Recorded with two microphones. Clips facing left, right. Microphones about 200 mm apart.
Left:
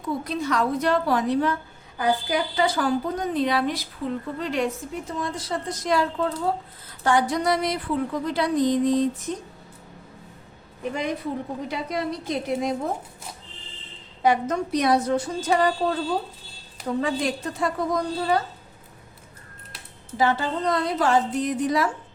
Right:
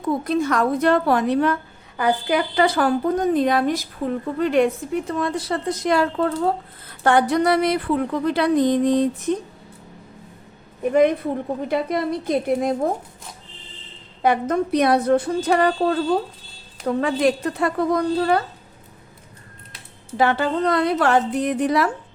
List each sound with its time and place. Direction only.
0.3 s a woman's voice: 50° right (ahead or behind)
10.9 s a woman's voice: 55° right (ahead or behind)
14.2 s a woman's voice: 55° right (ahead or behind)
17.0 s a woman's voice: 65° right (ahead or behind)
20.1 s a woman's voice: 65° right (ahead or behind)